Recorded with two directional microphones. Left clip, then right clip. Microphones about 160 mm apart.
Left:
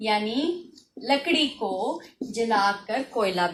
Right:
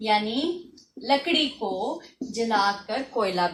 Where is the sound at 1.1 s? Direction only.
15° left (ahead or behind).